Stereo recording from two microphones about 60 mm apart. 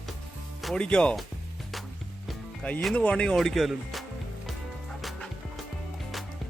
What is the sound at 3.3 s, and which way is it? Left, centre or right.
Speech, centre.